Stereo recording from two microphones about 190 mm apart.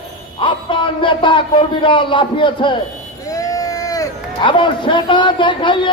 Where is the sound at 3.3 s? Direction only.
20° left (ahead or behind).